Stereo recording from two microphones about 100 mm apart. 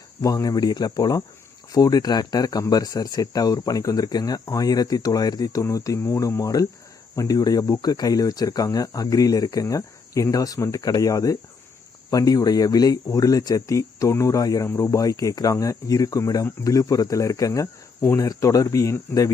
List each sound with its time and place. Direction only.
0.2 s speech: 35° left (ahead or behind)